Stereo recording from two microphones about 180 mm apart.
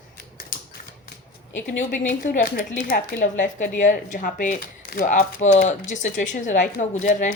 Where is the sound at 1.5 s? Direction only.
45° left (ahead or behind).